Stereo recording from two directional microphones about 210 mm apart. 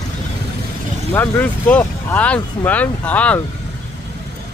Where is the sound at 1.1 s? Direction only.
10° left (ahead or behind).